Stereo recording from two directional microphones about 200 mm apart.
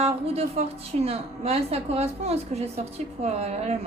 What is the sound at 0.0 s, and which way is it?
A woman's voice, 30° right (ahead or behind).